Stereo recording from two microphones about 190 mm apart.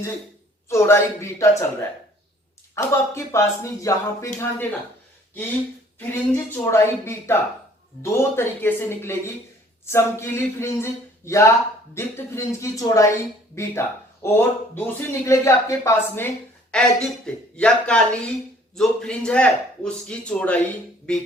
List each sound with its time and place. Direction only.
0.7 s speech: 15° left (ahead or behind)
2.7 s speech: 15° left (ahead or behind)
6.0 s speech: 10° left (ahead or behind)